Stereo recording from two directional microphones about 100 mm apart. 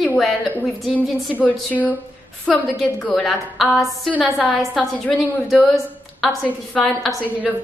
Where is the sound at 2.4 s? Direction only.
Centre (ahead or behind).